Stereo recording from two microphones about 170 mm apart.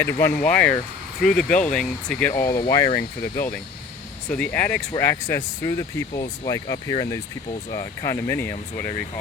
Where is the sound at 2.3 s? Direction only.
15° left (ahead or behind).